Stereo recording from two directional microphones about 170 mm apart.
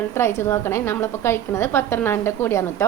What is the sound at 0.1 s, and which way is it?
A woman's voice, 15° left (ahead or behind).